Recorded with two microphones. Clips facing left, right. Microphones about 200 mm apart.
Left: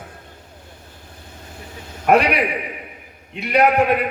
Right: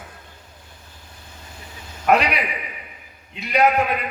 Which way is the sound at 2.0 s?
50° left (ahead or behind).